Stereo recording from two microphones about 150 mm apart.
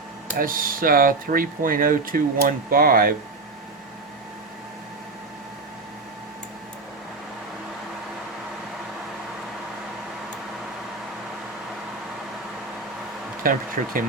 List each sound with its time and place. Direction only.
0.3 s speech: 70° right (ahead or behind)
13.4 s speech: 70° right (ahead or behind)